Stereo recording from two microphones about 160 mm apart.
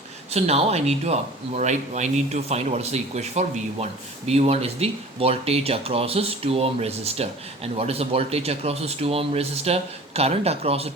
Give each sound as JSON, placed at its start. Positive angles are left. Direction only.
{"t": 0.3, "sound": "speech", "side_deg": -40}